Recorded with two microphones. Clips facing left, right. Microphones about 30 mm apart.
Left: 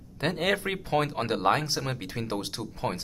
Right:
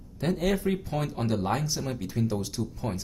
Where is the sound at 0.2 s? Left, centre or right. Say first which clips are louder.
Even; left.